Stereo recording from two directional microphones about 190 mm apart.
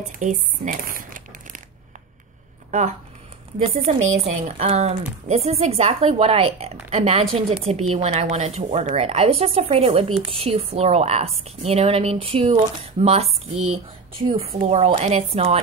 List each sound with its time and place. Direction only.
0.2 s speech: 45° right (ahead or behind)
3.5 s a woman's voice: 35° right (ahead or behind)